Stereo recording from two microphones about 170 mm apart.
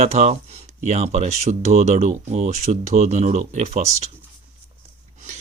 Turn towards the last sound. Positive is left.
turn(degrees=-40)  # may be behind; listen again after turning